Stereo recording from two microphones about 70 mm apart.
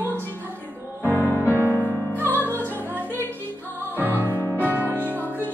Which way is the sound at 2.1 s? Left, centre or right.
Left.